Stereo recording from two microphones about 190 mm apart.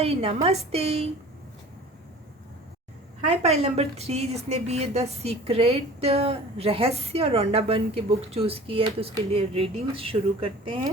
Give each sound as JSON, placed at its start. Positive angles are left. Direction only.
{"t": 0.0, "sound": "a woman's voice", "side_deg": -30}
{"t": 3.2, "sound": "a woman's voice", "side_deg": -35}